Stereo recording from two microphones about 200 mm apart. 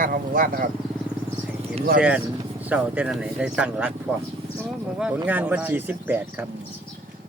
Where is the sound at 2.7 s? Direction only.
5° right (ahead or behind).